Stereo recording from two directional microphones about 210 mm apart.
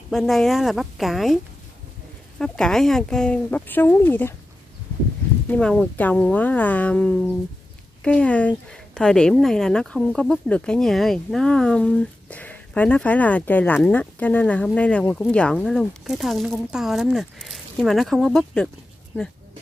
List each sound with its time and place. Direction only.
0.1 s speech: centre (ahead or behind)
5.5 s speech: 5° left (ahead or behind)